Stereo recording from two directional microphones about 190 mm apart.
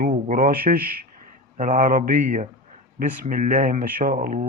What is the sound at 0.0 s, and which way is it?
Speech, 45° right (ahead or behind).